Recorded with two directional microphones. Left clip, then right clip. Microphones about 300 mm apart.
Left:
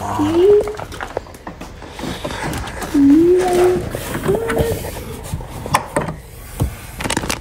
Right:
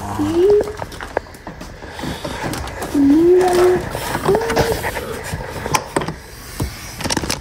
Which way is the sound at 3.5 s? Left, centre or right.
Left.